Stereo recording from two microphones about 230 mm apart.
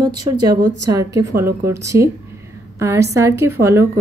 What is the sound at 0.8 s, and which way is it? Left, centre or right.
A woman's voice, centre.